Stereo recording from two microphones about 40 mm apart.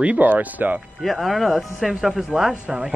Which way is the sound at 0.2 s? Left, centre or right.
Right.